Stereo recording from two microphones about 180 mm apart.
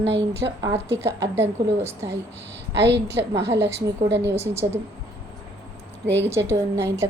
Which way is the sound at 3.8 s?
15° right (ahead or behind).